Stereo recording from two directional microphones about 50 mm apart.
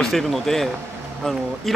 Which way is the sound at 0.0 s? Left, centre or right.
Centre.